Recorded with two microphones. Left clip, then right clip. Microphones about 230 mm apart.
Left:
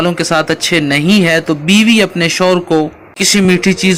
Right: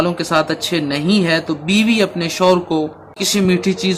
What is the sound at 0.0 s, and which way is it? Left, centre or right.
Speech, left.